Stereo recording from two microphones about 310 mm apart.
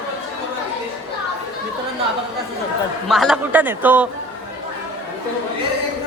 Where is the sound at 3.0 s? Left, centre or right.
Centre.